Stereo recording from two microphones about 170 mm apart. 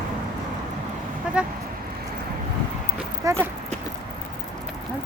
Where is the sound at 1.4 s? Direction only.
5° right (ahead or behind).